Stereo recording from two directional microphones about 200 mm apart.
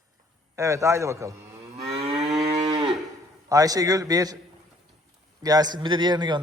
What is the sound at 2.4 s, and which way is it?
Moo, 20° right (ahead or behind).